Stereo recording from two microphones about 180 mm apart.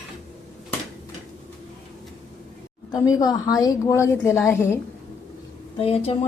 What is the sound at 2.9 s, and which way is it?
A woman's voice, 20° left (ahead or behind).